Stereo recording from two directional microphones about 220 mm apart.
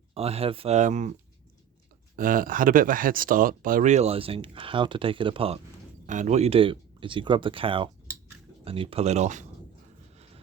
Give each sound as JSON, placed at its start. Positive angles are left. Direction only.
{"t": 0.1, "sound": "speech", "side_deg": -25}
{"t": 2.1, "sound": "speech", "side_deg": -40}